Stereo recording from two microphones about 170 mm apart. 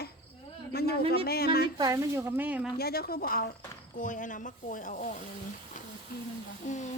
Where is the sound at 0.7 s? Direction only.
70° left (ahead or behind).